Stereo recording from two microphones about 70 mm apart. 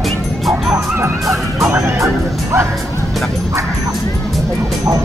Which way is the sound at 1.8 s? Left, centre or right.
Right.